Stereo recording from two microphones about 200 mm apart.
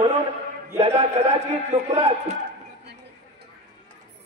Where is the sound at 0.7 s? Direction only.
30° right (ahead or behind).